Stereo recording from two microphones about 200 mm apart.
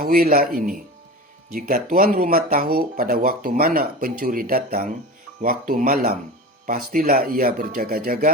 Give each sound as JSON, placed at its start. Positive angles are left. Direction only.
{"t": 0.0, "sound": "speech", "side_deg": -45}